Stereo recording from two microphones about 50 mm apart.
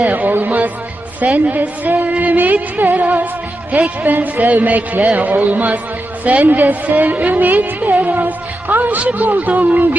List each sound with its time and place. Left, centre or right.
0.1 s a sound: right
1.2 s a woman's voice: right
7.9 s music: right
9.4 s a woman's voice: right